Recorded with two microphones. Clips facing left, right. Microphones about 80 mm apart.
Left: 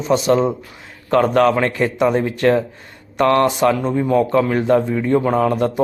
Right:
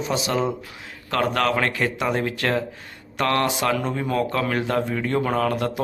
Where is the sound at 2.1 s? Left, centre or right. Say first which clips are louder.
Left 7 dB; centre.